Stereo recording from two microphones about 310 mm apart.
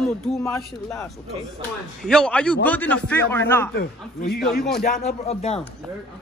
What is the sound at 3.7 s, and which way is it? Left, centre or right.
Speech, left.